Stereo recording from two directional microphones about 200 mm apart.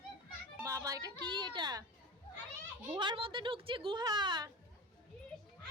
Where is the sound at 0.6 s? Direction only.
15° right (ahead or behind).